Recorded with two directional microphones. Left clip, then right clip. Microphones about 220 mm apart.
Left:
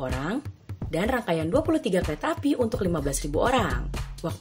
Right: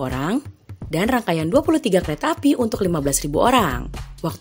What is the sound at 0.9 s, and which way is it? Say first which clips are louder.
Speech: right 5 dB; 50° right (ahead or behind).